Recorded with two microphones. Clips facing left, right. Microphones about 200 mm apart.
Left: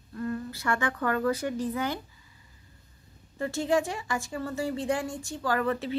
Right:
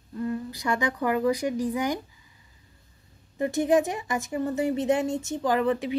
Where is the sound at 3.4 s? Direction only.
20° right (ahead or behind).